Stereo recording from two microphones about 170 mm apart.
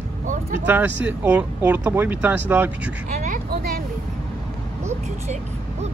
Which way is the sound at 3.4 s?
60° right (ahead or behind).